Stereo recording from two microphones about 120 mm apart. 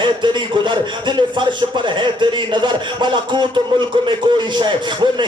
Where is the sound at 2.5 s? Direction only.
40° right (ahead or behind).